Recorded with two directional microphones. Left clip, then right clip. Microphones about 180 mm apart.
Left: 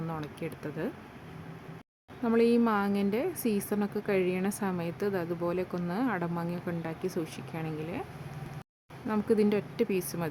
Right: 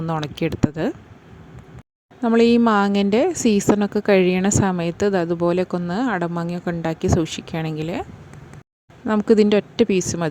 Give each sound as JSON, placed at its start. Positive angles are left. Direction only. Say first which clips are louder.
{"t": 0.1, "sound": "speech", "louder": "right 14 dB", "side_deg": -50}
{"t": 2.2, "sound": "speech", "louder": "right 10 dB", "side_deg": -45}
{"t": 9.0, "sound": "speech", "louder": "right 11 dB", "side_deg": -45}